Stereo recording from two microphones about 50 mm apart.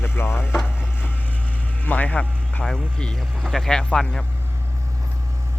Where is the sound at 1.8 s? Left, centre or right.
Left.